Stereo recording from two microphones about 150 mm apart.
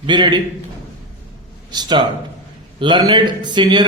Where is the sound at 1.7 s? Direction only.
30° right (ahead or behind).